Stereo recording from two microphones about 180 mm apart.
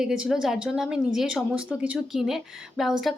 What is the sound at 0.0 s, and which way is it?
A woman's voice, 5° right (ahead or behind).